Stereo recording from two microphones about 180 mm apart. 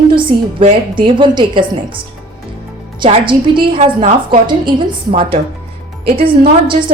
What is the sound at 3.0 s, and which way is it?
A woman's voice, 25° right (ahead or behind).